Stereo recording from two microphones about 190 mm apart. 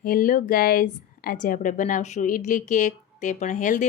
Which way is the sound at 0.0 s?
45° left (ahead or behind).